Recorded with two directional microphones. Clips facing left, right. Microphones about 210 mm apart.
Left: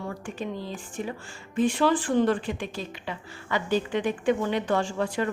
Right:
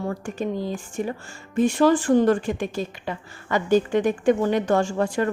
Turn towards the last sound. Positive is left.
turn(degrees=-45)  # may be behind; listen again after turning